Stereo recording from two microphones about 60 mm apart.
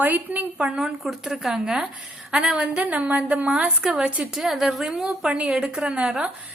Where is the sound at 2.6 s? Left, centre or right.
Right.